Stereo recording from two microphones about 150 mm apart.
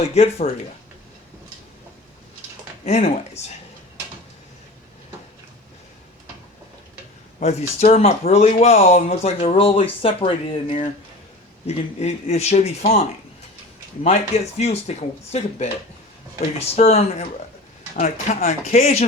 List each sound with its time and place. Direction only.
0.0 s speech: 45° left (ahead or behind)
2.8 s speech: 50° left (ahead or behind)
7.3 s speech: 50° left (ahead or behind)
14.6 s speech: 45° left (ahead or behind)
16.7 s speech: 45° left (ahead or behind)